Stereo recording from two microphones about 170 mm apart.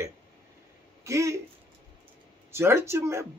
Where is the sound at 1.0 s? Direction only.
15° right (ahead or behind).